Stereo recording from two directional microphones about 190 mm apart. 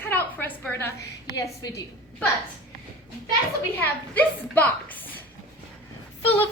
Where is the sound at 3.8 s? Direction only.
10° left (ahead or behind).